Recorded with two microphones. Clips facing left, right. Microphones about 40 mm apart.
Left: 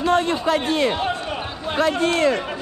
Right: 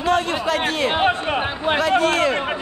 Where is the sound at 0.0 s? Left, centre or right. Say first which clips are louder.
Left 1 dB; right.